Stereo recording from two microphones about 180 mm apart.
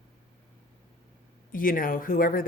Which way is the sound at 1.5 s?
50° left (ahead or behind).